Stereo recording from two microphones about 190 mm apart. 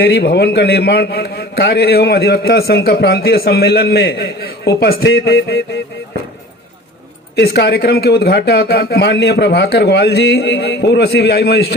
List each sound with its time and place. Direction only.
0.0 s a man's voice: 55° left (ahead or behind)
7.3 s a man's voice: 60° left (ahead or behind)